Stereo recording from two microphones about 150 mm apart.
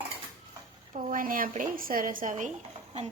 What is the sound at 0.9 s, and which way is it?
A woman's voice, 65° right (ahead or behind).